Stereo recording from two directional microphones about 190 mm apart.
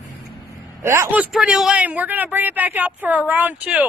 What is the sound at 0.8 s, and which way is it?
Speech, 10° right (ahead or behind).